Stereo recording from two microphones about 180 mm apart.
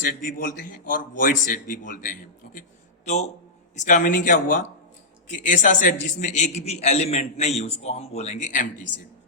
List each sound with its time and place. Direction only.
0.0 s a man's voice: 50° left (ahead or behind)